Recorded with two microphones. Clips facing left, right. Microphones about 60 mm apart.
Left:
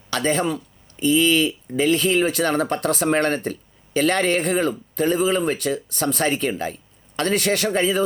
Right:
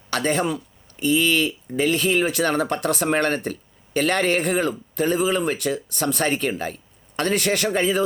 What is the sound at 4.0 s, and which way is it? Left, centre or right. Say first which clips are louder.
Speech: left 1 dB; right.